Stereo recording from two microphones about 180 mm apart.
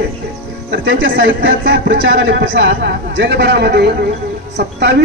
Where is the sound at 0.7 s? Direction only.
90° right; by 4.9 s 70° right (ahead or behind).